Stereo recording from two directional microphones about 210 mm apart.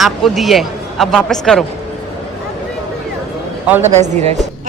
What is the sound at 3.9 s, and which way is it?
Speech, 30° right (ahead or behind).